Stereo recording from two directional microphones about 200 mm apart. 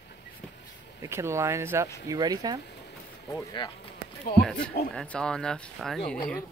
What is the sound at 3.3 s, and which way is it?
Speech, 20° left (ahead or behind).